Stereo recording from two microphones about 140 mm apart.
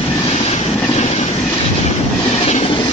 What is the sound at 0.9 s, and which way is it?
Train, 50° left (ahead or behind).